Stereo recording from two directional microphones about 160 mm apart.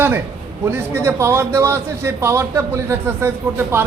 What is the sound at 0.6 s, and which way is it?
Speech, 15° right (ahead or behind).